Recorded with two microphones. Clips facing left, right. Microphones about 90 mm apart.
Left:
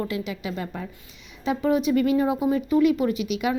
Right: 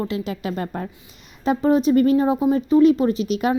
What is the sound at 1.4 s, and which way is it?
Speech, 35° right (ahead or behind).